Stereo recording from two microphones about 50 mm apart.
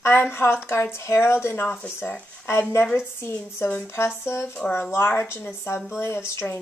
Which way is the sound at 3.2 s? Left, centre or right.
Left.